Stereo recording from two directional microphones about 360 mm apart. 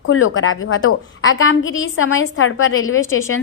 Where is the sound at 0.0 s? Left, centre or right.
Left.